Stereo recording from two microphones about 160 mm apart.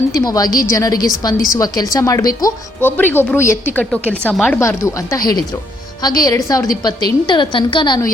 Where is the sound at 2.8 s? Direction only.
10° left (ahead or behind).